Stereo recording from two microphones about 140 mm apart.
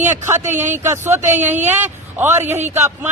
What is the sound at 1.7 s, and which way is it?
Speech, 15° right (ahead or behind).